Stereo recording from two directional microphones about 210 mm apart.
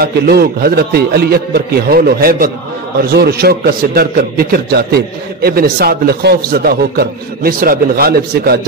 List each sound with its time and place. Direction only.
0.0 s a man's voice: 50° right (ahead or behind)